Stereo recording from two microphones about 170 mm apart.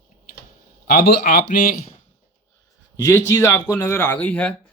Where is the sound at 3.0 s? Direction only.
15° left (ahead or behind).